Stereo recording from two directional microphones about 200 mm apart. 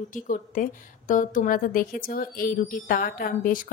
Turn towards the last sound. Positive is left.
turn(degrees=45)  # may be behind; listen again after turning